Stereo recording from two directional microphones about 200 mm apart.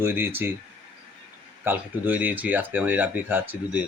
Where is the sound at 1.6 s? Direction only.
10° right (ahead or behind).